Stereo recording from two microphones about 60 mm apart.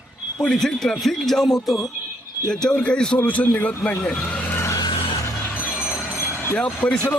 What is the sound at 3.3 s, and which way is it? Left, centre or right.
Speech, left.